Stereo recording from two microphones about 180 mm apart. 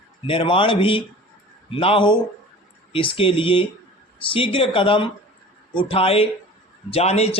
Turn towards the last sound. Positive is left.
turn(degrees=35)  # may be behind; listen again after turning